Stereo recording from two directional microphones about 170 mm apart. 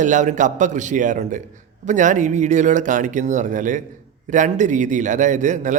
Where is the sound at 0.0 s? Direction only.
45° right (ahead or behind).